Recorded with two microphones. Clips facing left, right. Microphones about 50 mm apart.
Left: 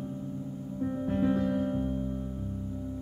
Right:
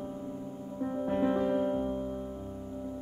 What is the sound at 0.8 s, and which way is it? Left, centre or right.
Music, centre.